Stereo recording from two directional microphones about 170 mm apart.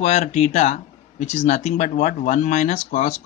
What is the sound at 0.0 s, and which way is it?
Speech, 40° left (ahead or behind).